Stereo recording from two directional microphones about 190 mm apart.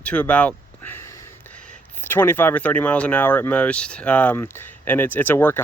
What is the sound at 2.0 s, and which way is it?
Speech, 10° left (ahead or behind).